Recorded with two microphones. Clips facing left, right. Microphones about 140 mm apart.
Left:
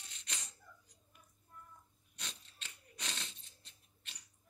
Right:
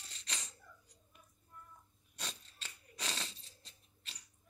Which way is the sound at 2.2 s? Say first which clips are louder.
Right 4 dB; 35° right (ahead or behind).